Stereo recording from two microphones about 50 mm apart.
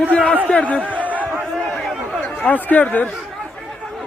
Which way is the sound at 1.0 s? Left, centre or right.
Right.